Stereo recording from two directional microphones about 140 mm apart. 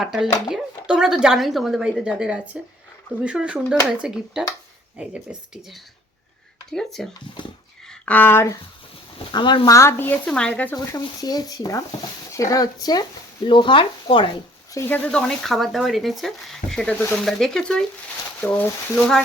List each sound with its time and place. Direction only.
0.0 s a woman's voice: 5° right (ahead or behind)
7.4 s speech: 35° left (ahead or behind)
7.9 s speech: 10° left (ahead or behind)
9.1 s speech: 35° left (ahead or behind)
9.7 s speech: 15° left (ahead or behind)
10.8 s speech: 25° left (ahead or behind)
14.7 s a woman's voice: 15° left (ahead or behind)
17.2 s a woman's voice: 5° left (ahead or behind)